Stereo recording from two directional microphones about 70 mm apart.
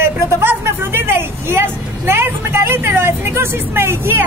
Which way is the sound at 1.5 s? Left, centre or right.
Right.